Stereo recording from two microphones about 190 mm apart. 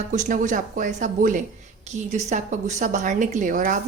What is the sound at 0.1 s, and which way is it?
A woman's voice, 40° right (ahead or behind).